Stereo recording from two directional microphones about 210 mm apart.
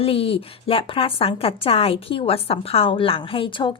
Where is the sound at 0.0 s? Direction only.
25° left (ahead or behind).